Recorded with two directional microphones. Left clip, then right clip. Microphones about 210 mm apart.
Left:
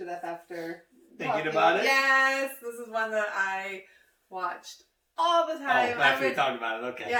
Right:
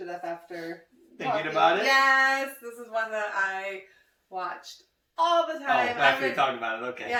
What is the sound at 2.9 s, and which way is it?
Speech, 15° left (ahead or behind).